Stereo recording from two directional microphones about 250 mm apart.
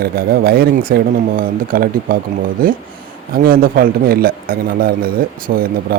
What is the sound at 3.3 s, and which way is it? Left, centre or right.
Speech, right.